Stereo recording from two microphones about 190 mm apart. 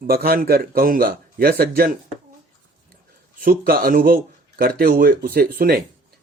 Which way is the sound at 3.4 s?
50° right (ahead or behind).